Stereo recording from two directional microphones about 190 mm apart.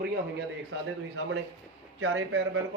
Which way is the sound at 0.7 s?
70° right (ahead or behind).